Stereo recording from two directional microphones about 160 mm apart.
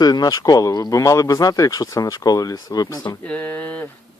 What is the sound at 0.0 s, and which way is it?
Speech, 25° left (ahead or behind).